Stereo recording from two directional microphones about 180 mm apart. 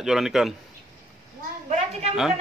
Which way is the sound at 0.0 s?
Centre (ahead or behind).